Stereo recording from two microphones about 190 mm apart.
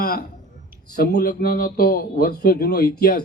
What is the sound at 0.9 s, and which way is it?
Speech, 55° left (ahead or behind).